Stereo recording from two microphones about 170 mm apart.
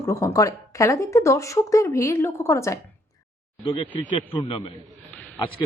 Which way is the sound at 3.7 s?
30° left (ahead or behind).